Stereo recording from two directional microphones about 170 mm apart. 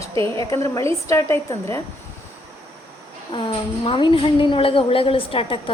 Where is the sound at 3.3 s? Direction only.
30° left (ahead or behind).